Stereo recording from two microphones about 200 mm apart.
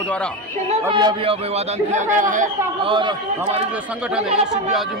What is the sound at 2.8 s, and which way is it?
Speech, 25° right (ahead or behind).